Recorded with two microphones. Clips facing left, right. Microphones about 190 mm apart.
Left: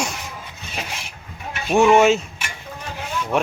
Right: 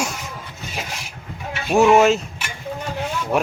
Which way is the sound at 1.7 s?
5° right (ahead or behind).